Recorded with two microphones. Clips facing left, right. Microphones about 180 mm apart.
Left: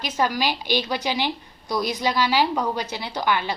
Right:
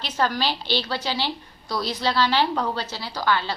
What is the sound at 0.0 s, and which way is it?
A woman's voice, 10° left (ahead or behind).